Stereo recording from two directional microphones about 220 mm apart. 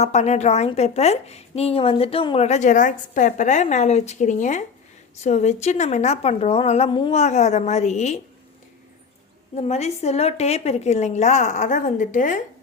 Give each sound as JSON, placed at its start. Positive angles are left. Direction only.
{"t": 0.0, "sound": "a woman's voice", "side_deg": 30}
{"t": 9.6, "sound": "a woman's voice", "side_deg": 30}